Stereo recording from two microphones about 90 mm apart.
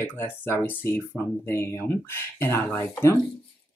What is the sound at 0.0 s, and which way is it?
Speech, 25° left (ahead or behind).